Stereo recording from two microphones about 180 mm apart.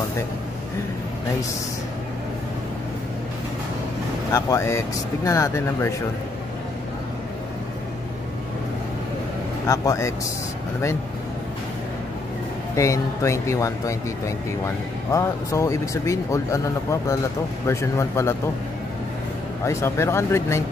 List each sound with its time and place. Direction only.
4.3 s speech: 15° left (ahead or behind)
9.7 s speech: 15° left (ahead or behind)
12.7 s speech: 15° left (ahead or behind)
19.6 s speech: 15° left (ahead or behind)